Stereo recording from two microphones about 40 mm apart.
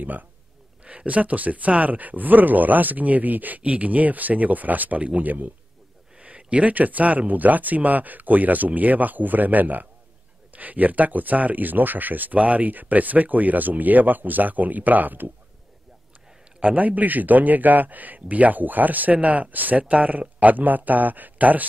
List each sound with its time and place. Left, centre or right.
0.8 s speech: right
6.1 s speech: right
16.6 s speech: right